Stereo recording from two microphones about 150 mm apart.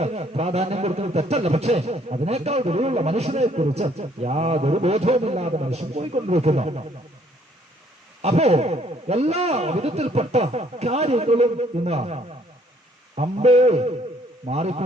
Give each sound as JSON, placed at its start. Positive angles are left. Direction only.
{"t": 0.0, "sound": "speech", "side_deg": -45}
{"t": 8.2, "sound": "speech", "side_deg": -45}